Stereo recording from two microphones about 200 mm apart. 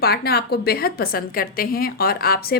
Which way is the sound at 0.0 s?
50° left (ahead or behind).